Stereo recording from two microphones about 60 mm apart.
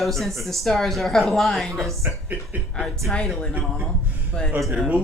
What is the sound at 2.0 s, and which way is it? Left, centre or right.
Speech, right.